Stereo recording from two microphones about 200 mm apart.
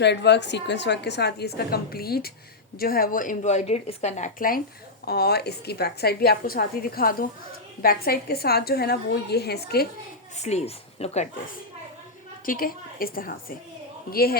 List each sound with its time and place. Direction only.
0.0 s a woman's voice: 60° left (ahead or behind)
10.3 s speech: 35° left (ahead or behind)
12.5 s a woman's voice: 45° left (ahead or behind)